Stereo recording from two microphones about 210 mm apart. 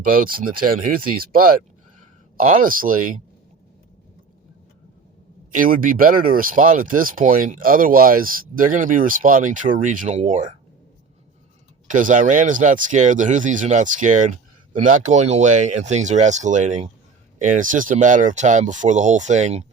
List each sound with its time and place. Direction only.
0.1 s speech: 45° right (ahead or behind)
5.5 s speech: 40° right (ahead or behind)
11.9 s speech: 40° right (ahead or behind)